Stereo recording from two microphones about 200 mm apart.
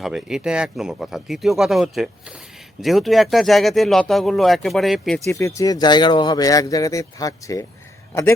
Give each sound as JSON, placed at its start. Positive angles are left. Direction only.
{"t": 0.0, "sound": "speech", "side_deg": 0}
{"t": 5.3, "sound": "speech", "side_deg": 15}